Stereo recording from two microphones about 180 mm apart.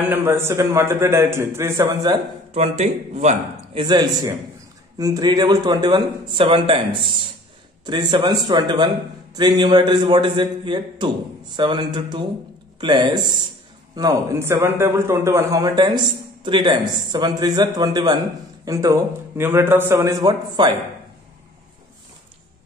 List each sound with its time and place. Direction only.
0.1 s a man's voice: 15° right (ahead or behind)
2.5 s speech: 35° right (ahead or behind)
3.8 s a man's voice: 25° right (ahead or behind)